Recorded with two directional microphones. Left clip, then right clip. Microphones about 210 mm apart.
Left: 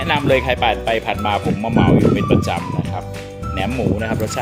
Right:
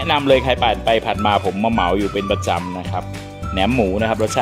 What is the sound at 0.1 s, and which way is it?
Speech, 20° right (ahead or behind).